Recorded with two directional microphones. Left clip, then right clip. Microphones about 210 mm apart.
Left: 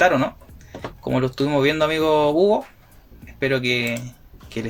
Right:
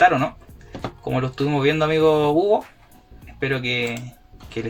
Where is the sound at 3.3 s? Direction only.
45° left (ahead or behind).